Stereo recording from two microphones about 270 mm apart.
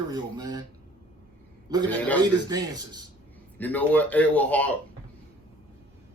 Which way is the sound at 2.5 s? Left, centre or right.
Centre.